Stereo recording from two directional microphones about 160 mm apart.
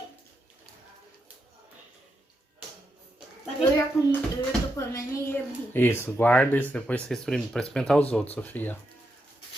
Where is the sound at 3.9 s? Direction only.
Centre (ahead or behind).